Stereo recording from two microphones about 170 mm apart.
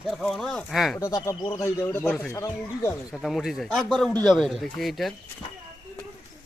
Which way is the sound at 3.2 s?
Centre (ahead or behind).